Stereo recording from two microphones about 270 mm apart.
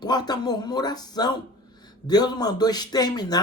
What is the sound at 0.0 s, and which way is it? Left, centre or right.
Speech, centre.